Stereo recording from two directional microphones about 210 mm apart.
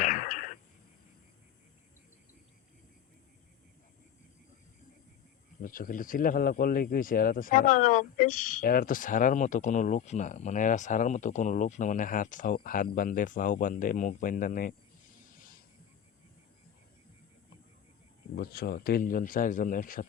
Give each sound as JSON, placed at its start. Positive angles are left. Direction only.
{"t": 0.0, "sound": "a sound", "side_deg": 40}
{"t": 5.6, "sound": "speech", "side_deg": 40}
{"t": 18.3, "sound": "speech", "side_deg": 45}